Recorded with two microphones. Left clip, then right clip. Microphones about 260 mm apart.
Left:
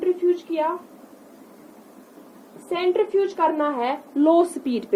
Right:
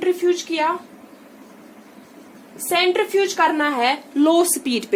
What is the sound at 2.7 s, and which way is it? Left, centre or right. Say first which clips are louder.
Speech: right 3 dB; centre.